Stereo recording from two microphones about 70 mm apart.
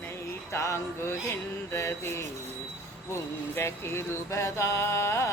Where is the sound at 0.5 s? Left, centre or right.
Left.